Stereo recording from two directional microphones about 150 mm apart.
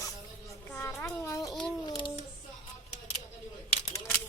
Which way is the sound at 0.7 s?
15° left (ahead or behind).